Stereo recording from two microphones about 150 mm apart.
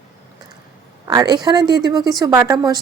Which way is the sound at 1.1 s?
25° right (ahead or behind).